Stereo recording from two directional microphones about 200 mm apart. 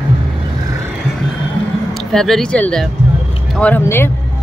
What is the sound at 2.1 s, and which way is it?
Speech, centre (ahead or behind).